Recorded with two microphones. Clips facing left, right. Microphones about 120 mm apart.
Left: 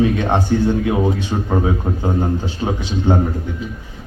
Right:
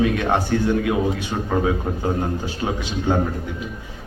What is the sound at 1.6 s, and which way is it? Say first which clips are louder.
Speech: left 2 dB; 25° left (ahead or behind).